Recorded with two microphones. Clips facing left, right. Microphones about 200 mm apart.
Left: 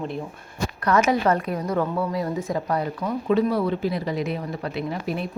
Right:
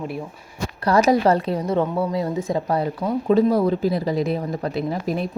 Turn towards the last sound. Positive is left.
turn(degrees=-40)  # may be behind; listen again after turning